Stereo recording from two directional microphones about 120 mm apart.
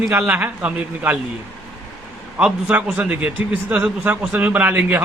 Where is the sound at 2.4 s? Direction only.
5° right (ahead or behind).